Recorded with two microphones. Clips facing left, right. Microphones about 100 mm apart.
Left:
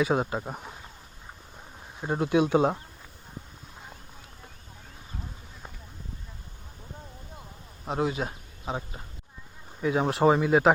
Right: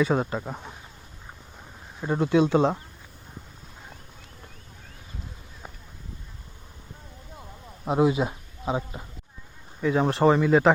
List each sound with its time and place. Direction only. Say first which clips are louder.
0.0 s speech: right 2 dB; 10° left (ahead or behind)
2.0 s speech: right 3 dB; 5° left (ahead or behind)
7.9 s speech: right 6 dB; 10° right (ahead or behind)
9.8 s speech: right 2 dB; 5° left (ahead or behind)